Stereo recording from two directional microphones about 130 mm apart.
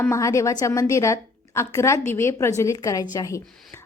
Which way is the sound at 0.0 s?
25° left (ahead or behind).